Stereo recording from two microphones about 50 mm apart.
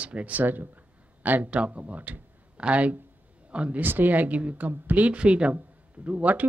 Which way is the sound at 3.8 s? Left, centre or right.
Right.